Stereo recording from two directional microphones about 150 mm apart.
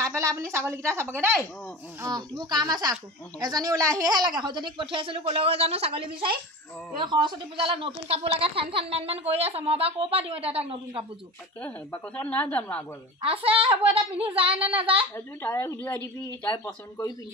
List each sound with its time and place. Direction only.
0.2 s speech: 20° right (ahead or behind); by 11.1 s 40° right (ahead or behind)
11.6 s a woman's voice: 10° left (ahead or behind)
13.2 s speech: 40° right (ahead or behind)
15.1 s a woman's voice: 15° left (ahead or behind)